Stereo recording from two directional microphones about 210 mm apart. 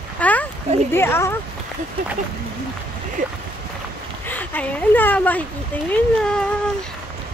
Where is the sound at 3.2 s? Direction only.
35° right (ahead or behind).